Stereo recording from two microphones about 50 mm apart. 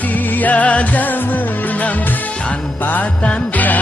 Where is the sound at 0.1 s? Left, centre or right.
Left.